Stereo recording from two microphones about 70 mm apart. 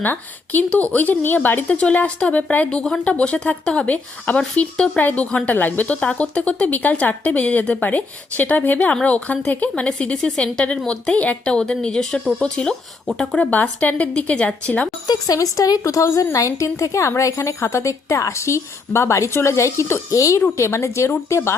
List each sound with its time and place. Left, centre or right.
0.0 s speech: left
1.6 s speech: centre
15.0 s speech: left
15.4 s a woman's voice: left